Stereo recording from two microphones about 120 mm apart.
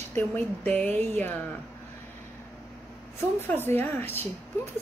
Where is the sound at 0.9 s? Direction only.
65° right (ahead or behind).